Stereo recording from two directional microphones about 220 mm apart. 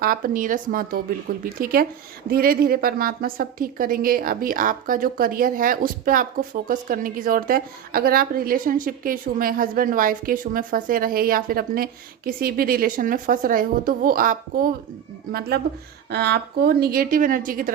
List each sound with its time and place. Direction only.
0.0 s a woman's voice: 40° right (ahead or behind)